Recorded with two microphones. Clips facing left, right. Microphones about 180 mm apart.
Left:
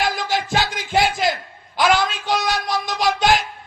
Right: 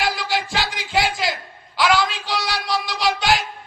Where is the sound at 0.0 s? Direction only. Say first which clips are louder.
Left 1 dB; 45° left (ahead or behind).